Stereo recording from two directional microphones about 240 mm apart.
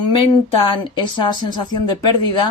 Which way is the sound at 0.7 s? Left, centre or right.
Centre.